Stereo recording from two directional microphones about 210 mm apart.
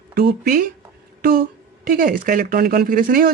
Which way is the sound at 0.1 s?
45° right (ahead or behind).